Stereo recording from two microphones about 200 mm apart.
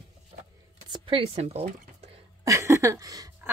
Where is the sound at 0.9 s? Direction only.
25° right (ahead or behind).